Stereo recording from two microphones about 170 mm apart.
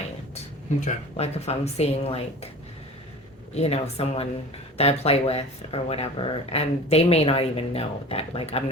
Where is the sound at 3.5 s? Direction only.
35° left (ahead or behind).